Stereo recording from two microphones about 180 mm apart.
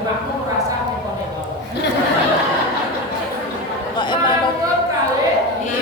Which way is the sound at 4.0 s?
25° left (ahead or behind).